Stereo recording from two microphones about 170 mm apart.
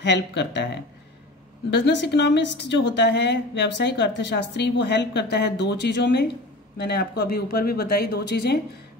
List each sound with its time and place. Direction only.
0.0 s a woman's voice: 90° left
6.8 s speech: 70° left (ahead or behind)